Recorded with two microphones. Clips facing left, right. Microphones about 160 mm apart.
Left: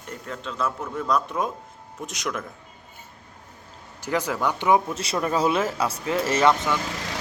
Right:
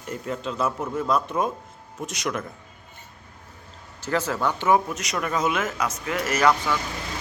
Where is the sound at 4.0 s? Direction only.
15° left (ahead or behind).